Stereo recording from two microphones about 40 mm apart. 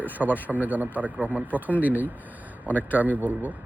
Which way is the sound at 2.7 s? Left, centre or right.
Left.